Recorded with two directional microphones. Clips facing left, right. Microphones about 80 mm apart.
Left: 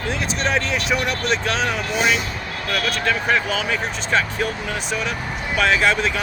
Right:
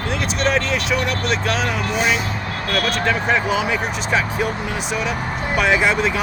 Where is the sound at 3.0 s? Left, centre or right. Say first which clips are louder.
Even; centre.